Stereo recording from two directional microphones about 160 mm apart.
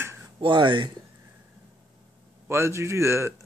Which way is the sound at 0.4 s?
30° right (ahead or behind).